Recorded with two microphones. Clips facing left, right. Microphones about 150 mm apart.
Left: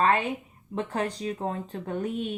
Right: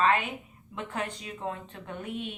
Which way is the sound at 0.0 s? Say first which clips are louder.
Left 2 dB; 35° left (ahead or behind).